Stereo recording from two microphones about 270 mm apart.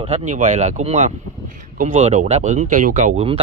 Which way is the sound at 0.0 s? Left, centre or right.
Right.